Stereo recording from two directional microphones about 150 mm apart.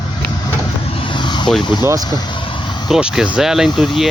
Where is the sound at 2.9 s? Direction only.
5° right (ahead or behind).